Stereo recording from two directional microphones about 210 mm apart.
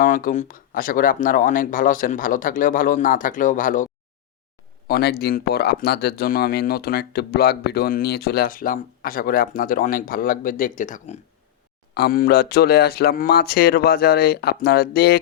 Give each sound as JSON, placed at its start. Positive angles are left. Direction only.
{"t": 0.0, "sound": "speech", "side_deg": 40}
{"t": 4.9, "sound": "speech", "side_deg": 50}
{"t": 11.9, "sound": "speech", "side_deg": 45}